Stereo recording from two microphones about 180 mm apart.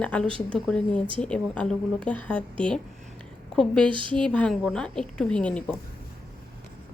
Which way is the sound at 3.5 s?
5° left (ahead or behind).